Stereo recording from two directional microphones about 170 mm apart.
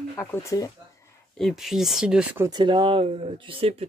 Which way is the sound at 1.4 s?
Centre (ahead or behind).